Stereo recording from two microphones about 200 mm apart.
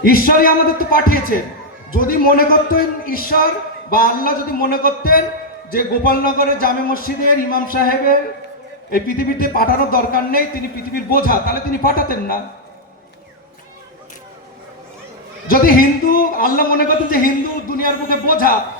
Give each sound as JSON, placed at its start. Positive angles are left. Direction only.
{"t": 0.0, "sound": "a man's voice", "side_deg": 45}
{"t": 9.0, "sound": "a man's voice", "side_deg": 45}
{"t": 15.4, "sound": "a man's voice", "side_deg": 45}